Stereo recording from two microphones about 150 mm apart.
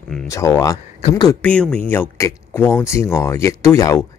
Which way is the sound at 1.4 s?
5° left (ahead or behind).